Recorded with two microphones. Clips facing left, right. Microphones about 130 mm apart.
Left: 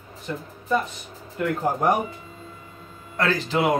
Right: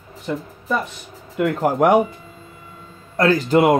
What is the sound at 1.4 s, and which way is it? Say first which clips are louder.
Speech: right 6 dB; 85° right.